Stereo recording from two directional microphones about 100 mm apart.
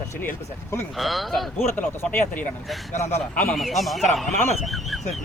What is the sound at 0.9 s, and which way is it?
Speech, centre (ahead or behind).